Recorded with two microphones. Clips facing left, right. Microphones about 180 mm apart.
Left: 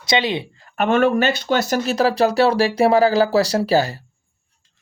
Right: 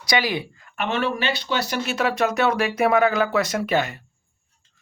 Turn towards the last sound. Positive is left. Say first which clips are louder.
# left 5 dB
turn(degrees=35)  # may be behind; listen again after turning